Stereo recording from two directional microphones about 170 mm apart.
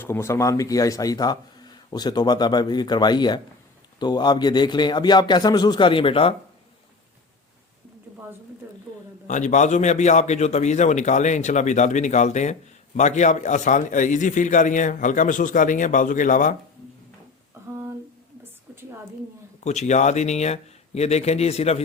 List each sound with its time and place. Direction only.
0.0 s speech: 15° left (ahead or behind); by 6.3 s 30° left (ahead or behind)
9.2 s a man's voice: 45° left (ahead or behind)
19.6 s speech: 40° left (ahead or behind)